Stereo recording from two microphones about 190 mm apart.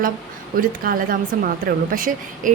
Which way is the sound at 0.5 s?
50° right (ahead or behind).